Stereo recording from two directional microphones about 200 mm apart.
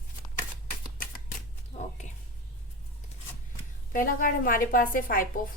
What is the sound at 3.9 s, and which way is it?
A woman's voice, 45° left (ahead or behind).